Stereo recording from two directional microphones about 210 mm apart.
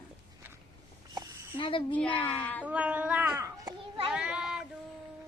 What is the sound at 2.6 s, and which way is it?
A child's voice, 5° right (ahead or behind).